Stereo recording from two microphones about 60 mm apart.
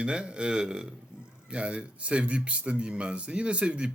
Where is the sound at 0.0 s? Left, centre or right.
Centre.